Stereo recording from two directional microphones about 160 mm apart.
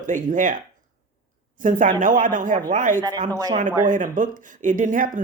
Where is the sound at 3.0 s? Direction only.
25° right (ahead or behind).